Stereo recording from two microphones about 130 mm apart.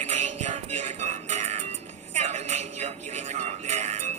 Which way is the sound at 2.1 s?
60° right (ahead or behind).